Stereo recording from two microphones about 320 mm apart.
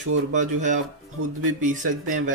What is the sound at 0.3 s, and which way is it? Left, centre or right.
Speech, right.